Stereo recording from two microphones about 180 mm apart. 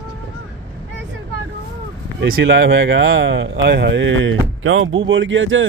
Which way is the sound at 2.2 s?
85° right.